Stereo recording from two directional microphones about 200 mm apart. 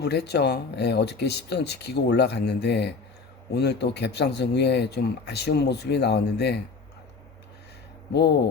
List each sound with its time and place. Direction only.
0.0 s speech: 55° left (ahead or behind)